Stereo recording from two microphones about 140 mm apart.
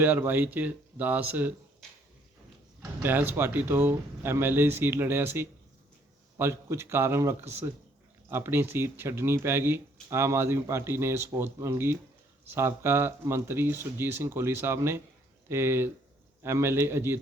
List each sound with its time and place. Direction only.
0.0 s speech: 15° right (ahead or behind)
3.0 s speech: 15° right (ahead or behind)